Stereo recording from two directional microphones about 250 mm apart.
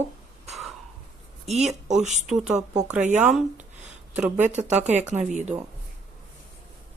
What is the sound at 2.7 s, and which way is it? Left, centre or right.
Speech, centre.